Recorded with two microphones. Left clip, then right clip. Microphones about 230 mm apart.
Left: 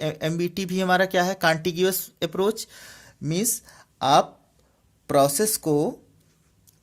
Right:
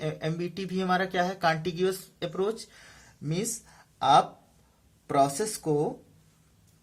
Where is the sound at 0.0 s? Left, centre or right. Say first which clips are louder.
Left 6 dB; left.